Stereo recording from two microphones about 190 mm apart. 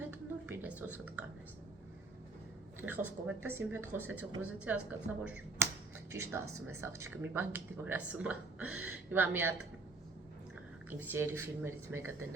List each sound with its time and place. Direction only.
0.0 s a woman's voice: 10° right (ahead or behind)
2.8 s speech: 10° right (ahead or behind)
10.8 s speech: 10° right (ahead or behind)